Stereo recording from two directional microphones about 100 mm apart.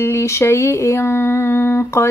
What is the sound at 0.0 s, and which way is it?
A woman's voice, 30° left (ahead or behind).